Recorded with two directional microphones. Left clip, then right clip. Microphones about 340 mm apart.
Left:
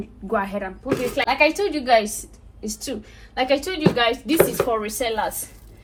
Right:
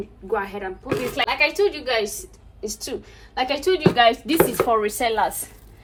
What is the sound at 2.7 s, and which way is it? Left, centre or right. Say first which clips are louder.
A woman's voice: right 1 dB; centre.